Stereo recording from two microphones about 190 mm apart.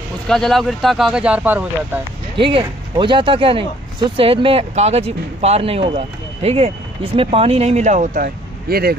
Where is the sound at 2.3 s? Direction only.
25° right (ahead or behind); by 8.9 s 55° right (ahead or behind).